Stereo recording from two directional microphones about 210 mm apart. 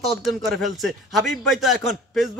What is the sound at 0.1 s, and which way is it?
A man's voice, centre (ahead or behind).